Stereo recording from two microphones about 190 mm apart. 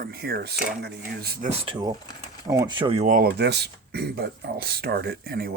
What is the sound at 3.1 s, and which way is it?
Speech, 55° right (ahead or behind).